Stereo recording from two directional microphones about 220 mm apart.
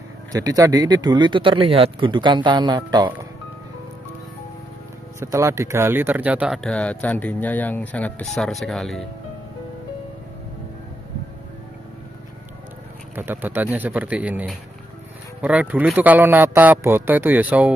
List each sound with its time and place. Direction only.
0.3 s speech: 15° right (ahead or behind)
5.2 s speech: 10° right (ahead or behind)
13.1 s a man's voice: 10° right (ahead or behind)